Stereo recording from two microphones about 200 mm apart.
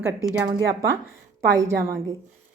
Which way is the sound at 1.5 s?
15° right (ahead or behind).